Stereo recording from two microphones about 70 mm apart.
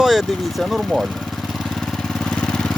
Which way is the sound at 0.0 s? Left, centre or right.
Centre.